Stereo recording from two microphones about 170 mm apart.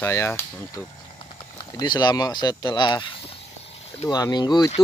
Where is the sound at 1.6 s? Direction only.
25° left (ahead or behind).